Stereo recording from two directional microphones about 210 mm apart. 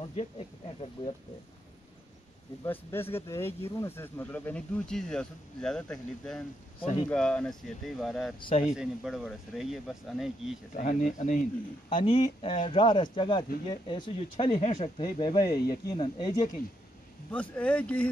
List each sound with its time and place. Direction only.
2.6 s speech: 10° left (ahead or behind)
6.8 s speech: 30° left (ahead or behind)
7.1 s speech: 5° left (ahead or behind)
8.4 s speech: 25° left (ahead or behind)
8.6 s speech: centre (ahead or behind)
10.7 s speech: 35° left (ahead or behind)
11.9 s speech: 25° left (ahead or behind)
17.3 s speech: 5° left (ahead or behind)